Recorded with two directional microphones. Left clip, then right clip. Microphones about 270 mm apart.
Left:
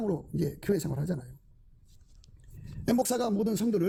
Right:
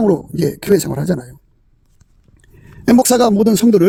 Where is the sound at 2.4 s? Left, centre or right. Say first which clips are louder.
Right 15 dB; right.